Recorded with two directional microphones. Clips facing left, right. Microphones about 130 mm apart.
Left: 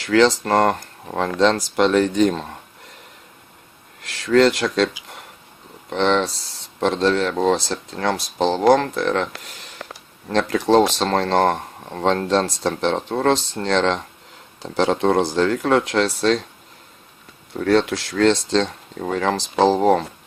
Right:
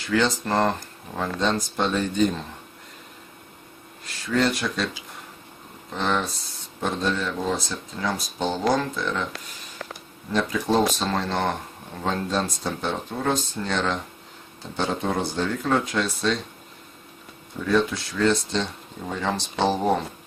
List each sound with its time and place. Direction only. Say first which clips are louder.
0.0 s speech: left 7 dB; 85° left
4.0 s speech: left 8 dB; 90° left
5.9 s speech: left 7 dB; 85° left
10.3 s speech: left 6 dB; 90° left
17.5 s speech: left 5 dB; 80° left